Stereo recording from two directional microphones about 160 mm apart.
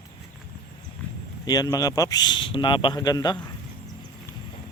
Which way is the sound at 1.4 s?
25° left (ahead or behind).